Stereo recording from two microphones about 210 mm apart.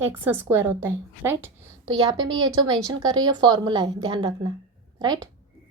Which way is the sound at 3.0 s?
20° right (ahead or behind).